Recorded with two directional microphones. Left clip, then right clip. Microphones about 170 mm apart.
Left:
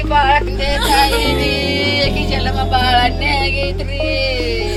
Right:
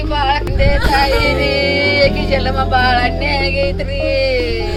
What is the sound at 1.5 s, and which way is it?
Music, 20° right (ahead or behind).